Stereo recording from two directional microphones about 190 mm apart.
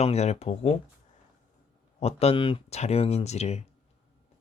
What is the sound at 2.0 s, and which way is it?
Speech, 30° left (ahead or behind).